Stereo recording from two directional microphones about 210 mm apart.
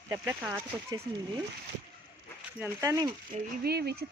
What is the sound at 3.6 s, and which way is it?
Speech, 50° right (ahead or behind).